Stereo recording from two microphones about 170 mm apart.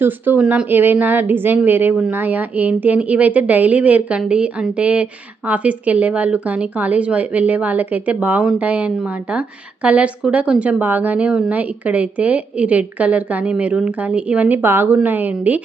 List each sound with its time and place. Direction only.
0.0 s a woman's voice: 10° right (ahead or behind)